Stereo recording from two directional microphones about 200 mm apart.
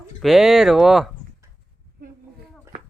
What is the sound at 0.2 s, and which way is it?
Speech, centre (ahead or behind).